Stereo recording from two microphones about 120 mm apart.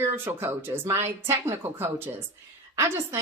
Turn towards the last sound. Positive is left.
turn(degrees=-25)  # may be behind; listen again after turning